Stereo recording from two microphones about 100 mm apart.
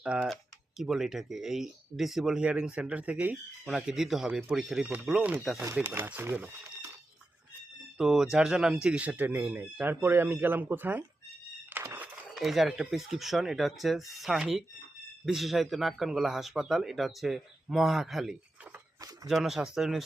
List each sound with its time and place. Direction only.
0.0 s speech: 10° right (ahead or behind)
7.9 s speech: centre (ahead or behind); by 11.0 s 20° right (ahead or behind)
11.7 s squeal: 20° right (ahead or behind)
12.3 s speech: centre (ahead or behind)